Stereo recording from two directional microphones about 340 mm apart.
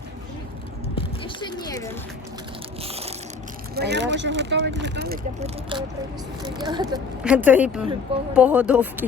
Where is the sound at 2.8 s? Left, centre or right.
Centre.